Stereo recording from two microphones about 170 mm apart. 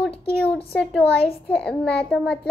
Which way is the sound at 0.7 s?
5° left (ahead or behind).